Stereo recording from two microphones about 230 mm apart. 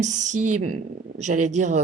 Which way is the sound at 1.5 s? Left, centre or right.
Right.